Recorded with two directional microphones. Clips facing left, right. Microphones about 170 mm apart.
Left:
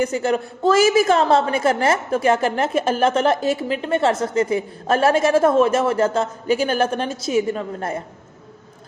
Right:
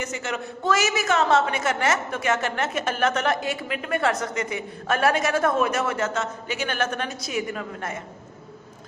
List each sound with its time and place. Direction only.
0.0 s a woman's voice: 35° left (ahead or behind)